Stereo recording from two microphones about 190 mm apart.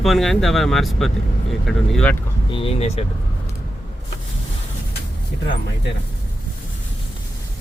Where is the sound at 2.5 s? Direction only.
30° left (ahead or behind).